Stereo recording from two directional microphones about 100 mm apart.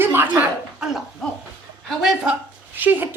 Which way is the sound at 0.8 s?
5° right (ahead or behind).